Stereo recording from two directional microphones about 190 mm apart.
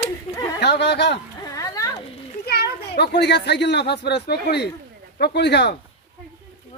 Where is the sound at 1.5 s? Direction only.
15° left (ahead or behind).